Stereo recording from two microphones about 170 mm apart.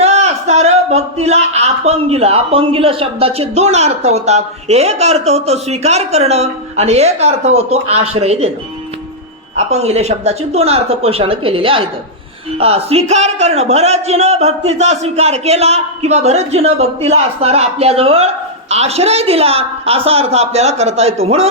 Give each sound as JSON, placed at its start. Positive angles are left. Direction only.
{"t": 0.0, "sound": "a man's voice", "side_deg": -40}
{"t": 9.6, "sound": "a man's voice", "side_deg": -40}